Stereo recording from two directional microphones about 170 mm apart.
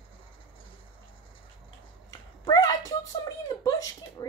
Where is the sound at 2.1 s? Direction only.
20° left (ahead or behind).